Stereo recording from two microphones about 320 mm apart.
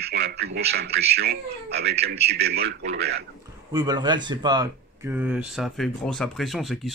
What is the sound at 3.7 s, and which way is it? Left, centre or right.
Speech, centre.